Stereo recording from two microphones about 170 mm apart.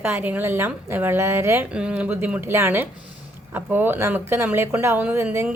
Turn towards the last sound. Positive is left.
turn(degrees=-15)  # may be behind; listen again after turning